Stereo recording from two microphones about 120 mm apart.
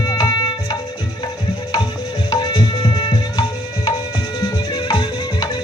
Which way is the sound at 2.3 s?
35° left (ahead or behind).